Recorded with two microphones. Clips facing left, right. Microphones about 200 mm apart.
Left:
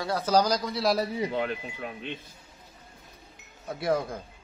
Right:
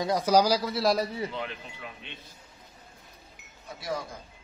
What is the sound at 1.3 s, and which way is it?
Speech, 50° left (ahead or behind).